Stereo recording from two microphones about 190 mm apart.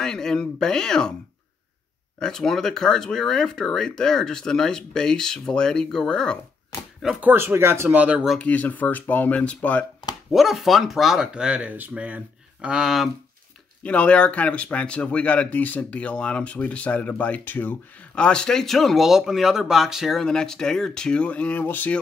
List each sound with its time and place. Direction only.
0.0 s speech: 5° left (ahead or behind)
2.1 s speech: 5° left (ahead or behind)